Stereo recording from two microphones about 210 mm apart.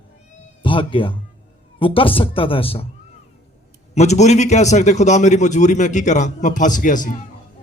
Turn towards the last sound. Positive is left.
turn(degrees=35)  # may be behind; listen again after turning